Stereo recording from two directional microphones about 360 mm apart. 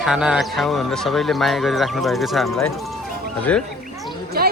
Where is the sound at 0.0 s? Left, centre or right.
Centre.